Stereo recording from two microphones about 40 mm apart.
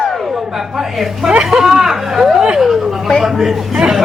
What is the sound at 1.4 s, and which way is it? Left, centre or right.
Speech, centre.